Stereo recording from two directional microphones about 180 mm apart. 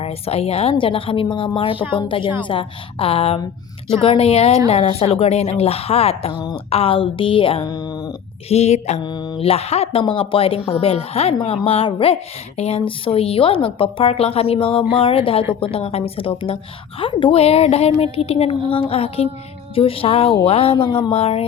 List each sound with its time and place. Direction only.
0.0 s a woman's voice: 35° left (ahead or behind)
8.4 s speech: 35° left (ahead or behind)
9.0 s speech: 25° left (ahead or behind)